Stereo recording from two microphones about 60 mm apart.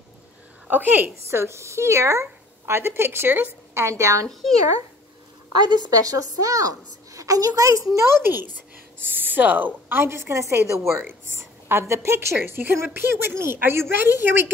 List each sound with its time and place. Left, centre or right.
0.7 s a woman's voice: right
1.4 s speech: right
3.7 s a woman's voice: right
4.3 s speech: centre
5.9 s a woman's voice: right
8.2 s a woman's voice: right